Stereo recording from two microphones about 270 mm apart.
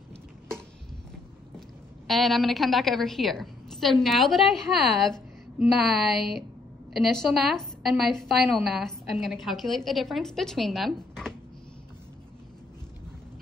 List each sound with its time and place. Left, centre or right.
2.0 s a woman's voice: centre